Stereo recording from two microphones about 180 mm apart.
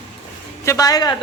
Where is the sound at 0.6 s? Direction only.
20° left (ahead or behind).